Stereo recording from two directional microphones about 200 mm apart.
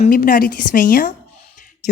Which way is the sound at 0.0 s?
45° left (ahead or behind).